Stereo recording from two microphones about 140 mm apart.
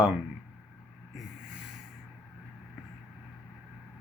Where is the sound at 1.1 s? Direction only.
5° right (ahead or behind).